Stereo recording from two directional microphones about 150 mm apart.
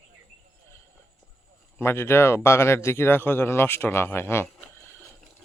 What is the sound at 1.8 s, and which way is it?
Speech, 15° left (ahead or behind).